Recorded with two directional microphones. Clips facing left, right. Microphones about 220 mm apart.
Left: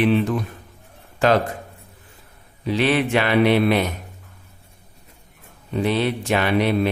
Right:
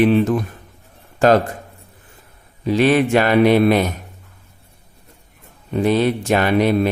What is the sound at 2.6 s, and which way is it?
Speech, 45° right (ahead or behind).